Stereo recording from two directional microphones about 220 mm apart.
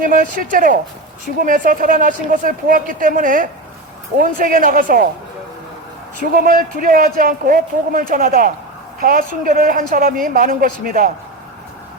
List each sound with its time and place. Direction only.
0.0 s speech: 40° right (ahead or behind)
6.3 s a woman's voice: 40° right (ahead or behind)